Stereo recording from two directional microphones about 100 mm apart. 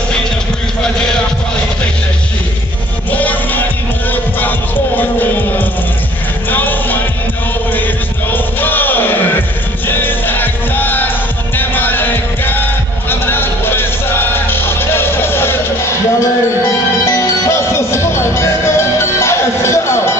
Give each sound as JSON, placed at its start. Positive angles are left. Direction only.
{"t": 3.1, "sound": "music", "side_deg": 15}
{"t": 8.3, "sound": "music", "side_deg": 20}